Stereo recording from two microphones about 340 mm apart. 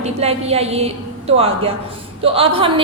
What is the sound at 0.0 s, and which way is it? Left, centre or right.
Speech, centre.